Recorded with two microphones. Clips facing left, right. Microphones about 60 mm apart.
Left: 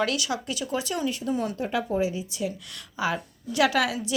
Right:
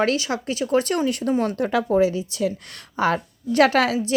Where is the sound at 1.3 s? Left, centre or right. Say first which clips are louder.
Right 6 dB; right.